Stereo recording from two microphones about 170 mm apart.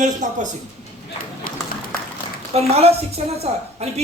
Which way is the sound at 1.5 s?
55° left (ahead or behind).